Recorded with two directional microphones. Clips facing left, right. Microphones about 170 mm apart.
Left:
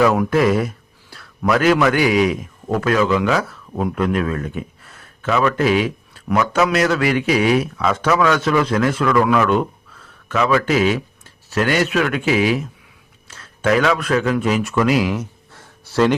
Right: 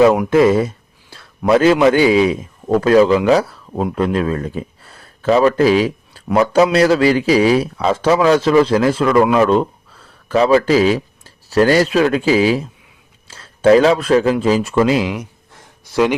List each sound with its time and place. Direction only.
0.0 s a man's voice: 25° right (ahead or behind)